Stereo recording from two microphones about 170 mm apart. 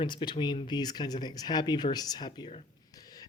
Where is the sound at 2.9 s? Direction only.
20° left (ahead or behind).